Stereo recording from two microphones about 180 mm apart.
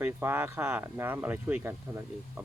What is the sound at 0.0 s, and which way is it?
Speech, 10° right (ahead or behind).